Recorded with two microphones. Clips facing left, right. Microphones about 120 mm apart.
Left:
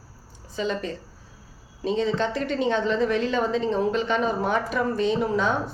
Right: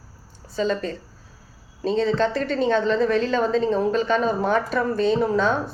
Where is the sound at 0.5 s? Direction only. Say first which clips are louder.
Right 4 dB; 15° left (ahead or behind).